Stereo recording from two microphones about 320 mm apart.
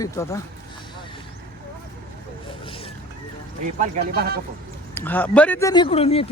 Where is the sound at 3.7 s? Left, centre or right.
Right.